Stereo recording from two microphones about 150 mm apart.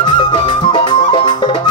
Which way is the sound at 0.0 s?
30° left (ahead or behind).